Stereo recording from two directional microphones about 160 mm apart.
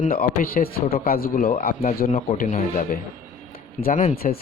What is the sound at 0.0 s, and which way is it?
A man's voice, 65° left (ahead or behind).